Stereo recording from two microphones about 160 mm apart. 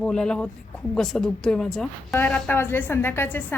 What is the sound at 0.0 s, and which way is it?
A woman's voice, 5° left (ahead or behind).